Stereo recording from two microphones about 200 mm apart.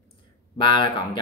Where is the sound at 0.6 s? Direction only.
25° left (ahead or behind).